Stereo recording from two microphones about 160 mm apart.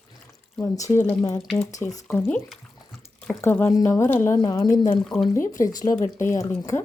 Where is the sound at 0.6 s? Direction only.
20° left (ahead or behind).